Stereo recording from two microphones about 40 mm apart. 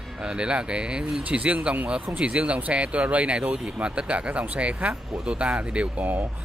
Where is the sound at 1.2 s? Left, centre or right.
Right.